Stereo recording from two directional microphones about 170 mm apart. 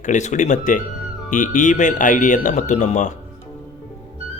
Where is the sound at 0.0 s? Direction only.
45° left (ahead or behind).